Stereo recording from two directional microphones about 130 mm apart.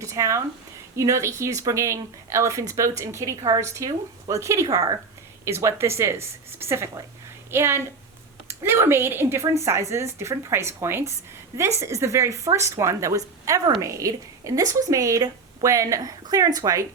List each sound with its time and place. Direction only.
0.0 s speech: 25° right (ahead or behind)